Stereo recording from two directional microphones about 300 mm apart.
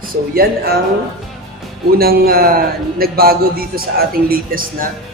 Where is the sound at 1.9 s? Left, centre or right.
Right.